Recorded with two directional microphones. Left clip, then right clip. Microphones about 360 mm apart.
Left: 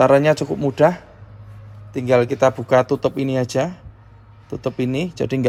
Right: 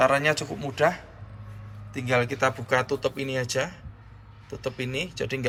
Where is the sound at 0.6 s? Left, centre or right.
Centre.